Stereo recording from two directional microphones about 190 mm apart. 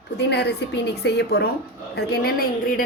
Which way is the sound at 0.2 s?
60° left (ahead or behind).